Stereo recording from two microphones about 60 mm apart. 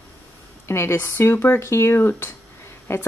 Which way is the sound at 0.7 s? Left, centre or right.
Left.